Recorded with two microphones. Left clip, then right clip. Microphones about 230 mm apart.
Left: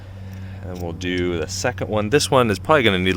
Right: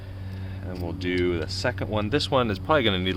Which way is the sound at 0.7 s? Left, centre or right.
Left.